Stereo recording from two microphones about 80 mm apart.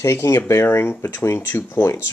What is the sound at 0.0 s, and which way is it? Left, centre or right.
Speech, left.